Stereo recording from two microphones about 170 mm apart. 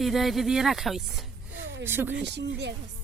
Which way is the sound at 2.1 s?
90° right.